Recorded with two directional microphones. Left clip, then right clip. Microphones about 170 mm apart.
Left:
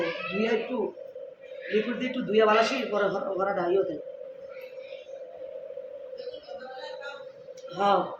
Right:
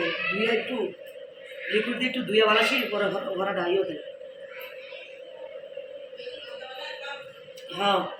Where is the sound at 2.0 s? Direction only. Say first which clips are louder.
Right 1 dB; 5° left (ahead or behind).